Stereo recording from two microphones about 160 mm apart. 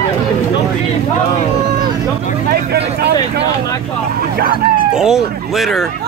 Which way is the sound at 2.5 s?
85° right.